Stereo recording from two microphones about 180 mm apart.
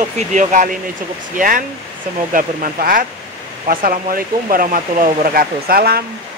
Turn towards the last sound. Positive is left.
turn(degrees=-60)  # may be behind; listen again after turning